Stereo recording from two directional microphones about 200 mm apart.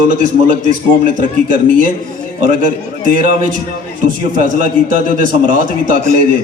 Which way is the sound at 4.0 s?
40° right (ahead or behind).